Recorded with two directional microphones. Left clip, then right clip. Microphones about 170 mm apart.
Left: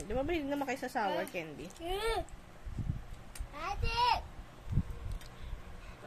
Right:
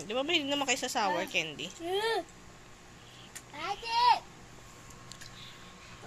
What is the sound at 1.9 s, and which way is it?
Speech, 25° left (ahead or behind).